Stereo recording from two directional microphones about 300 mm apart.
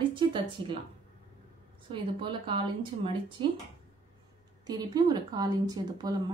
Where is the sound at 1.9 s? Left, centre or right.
Centre.